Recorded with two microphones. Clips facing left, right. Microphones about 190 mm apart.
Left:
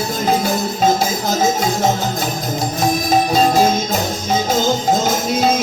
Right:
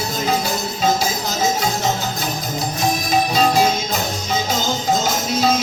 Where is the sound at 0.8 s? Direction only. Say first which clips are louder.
Left 3 dB; 50° left (ahead or behind).